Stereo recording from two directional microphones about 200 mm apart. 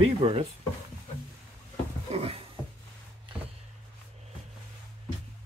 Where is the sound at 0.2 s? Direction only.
30° right (ahead or behind).